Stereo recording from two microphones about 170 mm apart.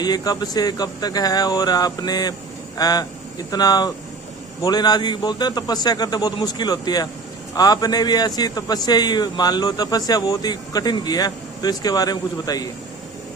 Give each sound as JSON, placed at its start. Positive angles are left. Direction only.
{"t": 0.0, "sound": "speech", "side_deg": 25}